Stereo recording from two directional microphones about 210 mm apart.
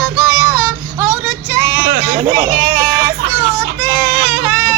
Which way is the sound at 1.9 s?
30° right (ahead or behind).